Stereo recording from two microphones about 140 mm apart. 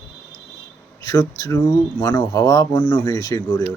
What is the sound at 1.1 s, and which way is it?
Speech, 25° left (ahead or behind).